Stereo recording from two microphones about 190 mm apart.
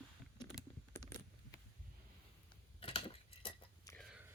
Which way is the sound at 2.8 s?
30° left (ahead or behind).